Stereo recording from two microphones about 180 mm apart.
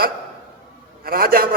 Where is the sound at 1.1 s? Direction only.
55° right (ahead or behind).